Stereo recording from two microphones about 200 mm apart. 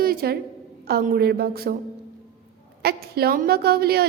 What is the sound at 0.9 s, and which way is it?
Speech, 50° right (ahead or behind).